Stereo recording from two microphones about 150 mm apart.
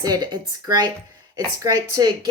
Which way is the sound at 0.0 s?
25° right (ahead or behind).